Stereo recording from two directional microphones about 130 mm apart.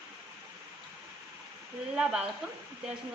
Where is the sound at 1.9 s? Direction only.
5° right (ahead or behind).